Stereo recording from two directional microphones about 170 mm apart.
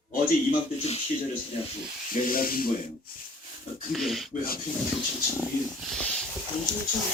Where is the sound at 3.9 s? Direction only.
Centre (ahead or behind).